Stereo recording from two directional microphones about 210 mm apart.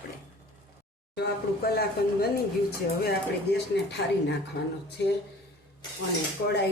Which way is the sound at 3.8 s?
55° left (ahead or behind).